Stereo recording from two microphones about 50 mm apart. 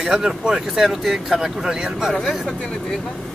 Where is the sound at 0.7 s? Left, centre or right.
Centre.